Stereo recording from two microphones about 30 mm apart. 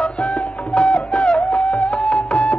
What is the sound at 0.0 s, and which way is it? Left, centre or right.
Music, left.